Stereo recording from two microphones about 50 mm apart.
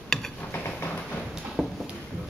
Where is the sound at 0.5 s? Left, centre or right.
Left.